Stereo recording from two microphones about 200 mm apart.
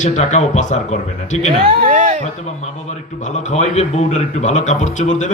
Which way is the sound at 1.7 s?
30° right (ahead or behind).